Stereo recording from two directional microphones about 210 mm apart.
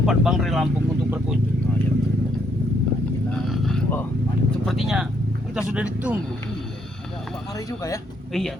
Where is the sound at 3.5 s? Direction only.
Centre (ahead or behind).